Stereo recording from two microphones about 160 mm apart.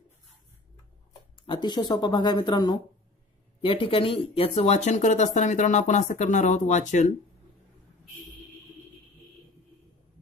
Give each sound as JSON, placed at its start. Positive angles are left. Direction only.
{"t": 1.4, "sound": "speech", "side_deg": 30}